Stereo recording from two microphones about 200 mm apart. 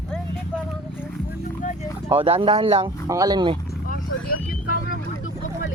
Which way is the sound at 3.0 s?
20° right (ahead or behind).